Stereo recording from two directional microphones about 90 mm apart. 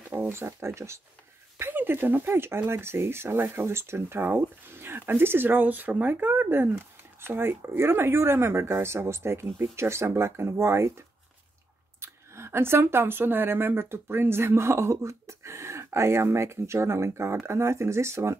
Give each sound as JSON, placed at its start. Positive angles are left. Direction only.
{"t": 0.1, "sound": "speech", "side_deg": -25}